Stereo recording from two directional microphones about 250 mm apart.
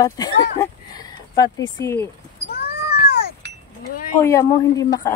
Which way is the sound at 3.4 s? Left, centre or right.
Right.